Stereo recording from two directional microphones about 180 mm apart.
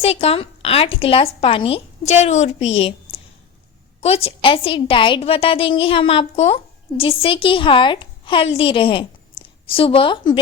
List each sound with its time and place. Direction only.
0.0 s a woman's voice: 35° left (ahead or behind)